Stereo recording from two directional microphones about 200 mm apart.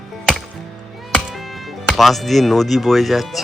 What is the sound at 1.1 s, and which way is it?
Music, centre (ahead or behind).